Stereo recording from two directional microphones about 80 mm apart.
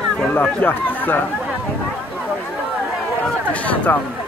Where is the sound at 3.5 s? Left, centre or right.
Centre.